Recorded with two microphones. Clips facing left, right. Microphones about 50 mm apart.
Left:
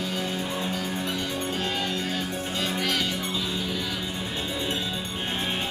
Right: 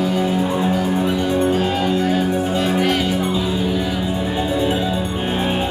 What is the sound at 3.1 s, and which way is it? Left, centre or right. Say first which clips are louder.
Music: right 10 dB; centre.